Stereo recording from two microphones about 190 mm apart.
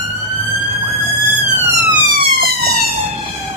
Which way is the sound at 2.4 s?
55° right (ahead or behind).